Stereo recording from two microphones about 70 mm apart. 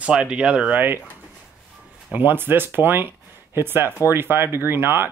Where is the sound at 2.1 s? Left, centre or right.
Right.